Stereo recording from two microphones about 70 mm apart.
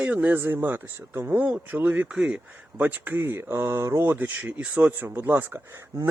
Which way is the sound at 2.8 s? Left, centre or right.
Right.